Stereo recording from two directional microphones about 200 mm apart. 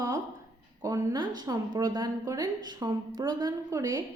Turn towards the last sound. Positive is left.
turn(degrees=-20)  # may be behind; listen again after turning